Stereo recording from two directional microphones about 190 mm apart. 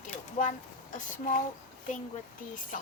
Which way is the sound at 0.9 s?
40° left (ahead or behind).